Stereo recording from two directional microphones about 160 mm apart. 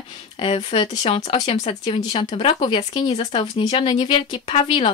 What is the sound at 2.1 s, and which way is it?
Speech, 35° left (ahead or behind).